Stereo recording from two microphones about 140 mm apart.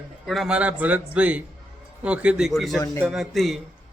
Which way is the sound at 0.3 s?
Centre (ahead or behind).